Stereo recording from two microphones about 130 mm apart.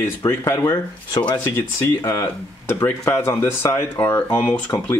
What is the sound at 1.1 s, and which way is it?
Speech, 35° left (ahead or behind).